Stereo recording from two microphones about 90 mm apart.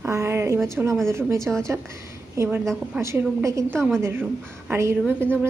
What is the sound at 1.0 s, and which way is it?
Speech, 30° right (ahead or behind).